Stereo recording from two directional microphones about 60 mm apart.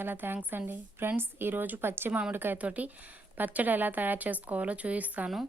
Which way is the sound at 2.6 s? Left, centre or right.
Right.